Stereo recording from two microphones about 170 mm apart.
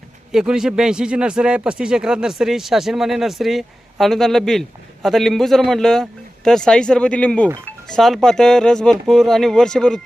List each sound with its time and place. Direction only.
0.3 s a man's voice: 5° right (ahead or behind)